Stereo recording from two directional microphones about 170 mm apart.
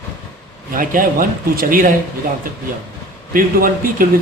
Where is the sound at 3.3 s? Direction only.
55° right (ahead or behind).